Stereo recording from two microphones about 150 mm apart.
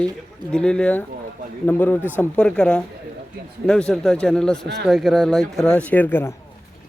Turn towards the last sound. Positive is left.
turn(degrees=15)  # may be behind; listen again after turning